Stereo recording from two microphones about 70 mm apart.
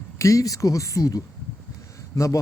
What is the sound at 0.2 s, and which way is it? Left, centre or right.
Speech, left.